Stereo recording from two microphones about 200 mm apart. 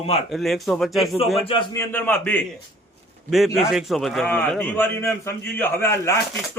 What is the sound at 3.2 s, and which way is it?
A man's voice, centre (ahead or behind).